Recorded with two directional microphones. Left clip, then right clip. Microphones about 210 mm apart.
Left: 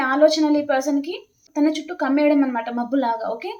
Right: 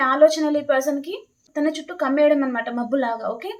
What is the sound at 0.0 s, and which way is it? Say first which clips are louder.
A woman's voice: right 1 dB; 15° right (ahead or behind).